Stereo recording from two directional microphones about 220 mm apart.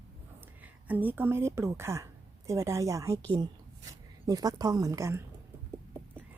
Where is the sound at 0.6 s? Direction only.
5° right (ahead or behind).